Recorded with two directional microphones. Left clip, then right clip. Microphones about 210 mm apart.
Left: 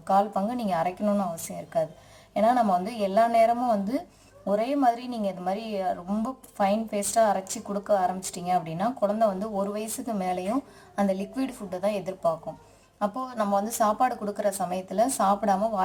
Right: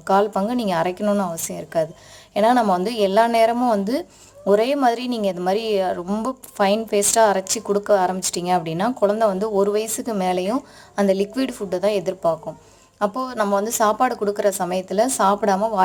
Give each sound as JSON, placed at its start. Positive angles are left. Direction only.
{"t": 0.1, "sound": "speech", "side_deg": -40}
{"t": 2.3, "sound": "a woman's voice", "side_deg": -45}